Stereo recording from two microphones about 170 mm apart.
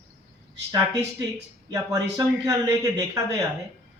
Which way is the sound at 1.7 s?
20° right (ahead or behind).